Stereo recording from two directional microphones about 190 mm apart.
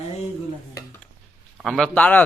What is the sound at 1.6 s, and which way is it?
Speech, centre (ahead or behind).